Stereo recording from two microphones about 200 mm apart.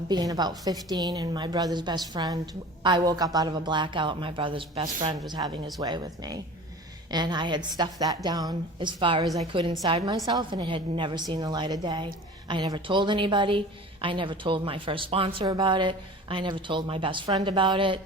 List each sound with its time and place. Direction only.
0.1 s a woman's voice: 20° right (ahead or behind)